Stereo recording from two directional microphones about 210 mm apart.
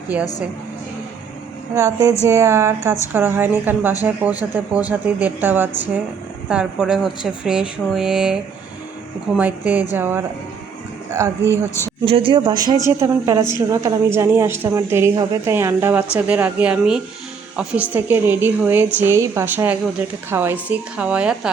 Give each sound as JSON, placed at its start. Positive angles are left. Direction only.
{"t": 0.1, "sound": "a woman's voice", "side_deg": -5}
{"t": 1.7, "sound": "a woman's voice", "side_deg": -15}
{"t": 12.0, "sound": "a woman's voice", "side_deg": -25}